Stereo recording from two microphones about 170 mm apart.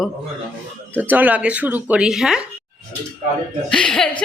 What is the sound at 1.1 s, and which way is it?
Speech, 10° right (ahead or behind).